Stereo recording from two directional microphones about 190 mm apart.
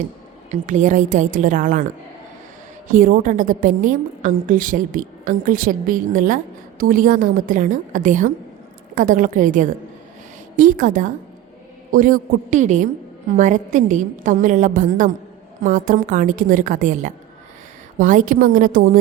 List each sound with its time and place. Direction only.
0.5 s a woman's voice: 40° right (ahead or behind)
2.9 s a woman's voice: 45° right (ahead or behind)